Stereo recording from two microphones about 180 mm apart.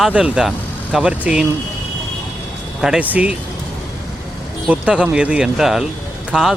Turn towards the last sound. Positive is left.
turn(degrees=0)  # may be behind; listen again after turning